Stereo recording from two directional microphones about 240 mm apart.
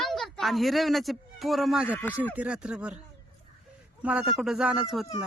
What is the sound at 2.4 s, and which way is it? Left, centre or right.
Speech, centre.